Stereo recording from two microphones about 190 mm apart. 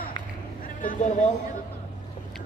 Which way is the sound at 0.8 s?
45° left (ahead or behind).